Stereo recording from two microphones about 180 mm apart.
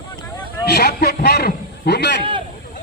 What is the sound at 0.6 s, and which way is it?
A man's voice, 65° left (ahead or behind).